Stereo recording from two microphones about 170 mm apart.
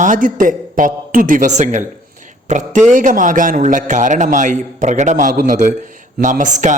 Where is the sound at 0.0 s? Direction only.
50° right (ahead or behind).